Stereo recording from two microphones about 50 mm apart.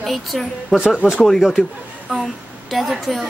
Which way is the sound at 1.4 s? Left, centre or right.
Centre.